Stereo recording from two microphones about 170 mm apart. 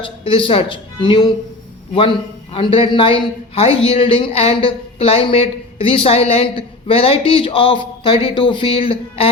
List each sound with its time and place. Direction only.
0.0 s a man's voice: 30° left (ahead or behind)